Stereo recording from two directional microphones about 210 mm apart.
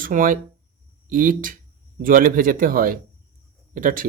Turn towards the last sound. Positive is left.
turn(degrees=-40)  # may be behind; listen again after turning